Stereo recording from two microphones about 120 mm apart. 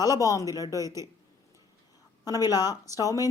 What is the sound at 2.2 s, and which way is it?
Speech, 30° left (ahead or behind).